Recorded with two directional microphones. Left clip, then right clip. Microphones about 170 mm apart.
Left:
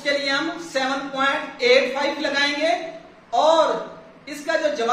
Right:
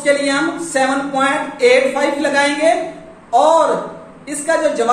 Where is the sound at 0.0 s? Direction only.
15° left (ahead or behind).